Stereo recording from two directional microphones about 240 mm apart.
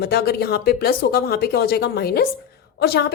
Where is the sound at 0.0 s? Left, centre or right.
Left.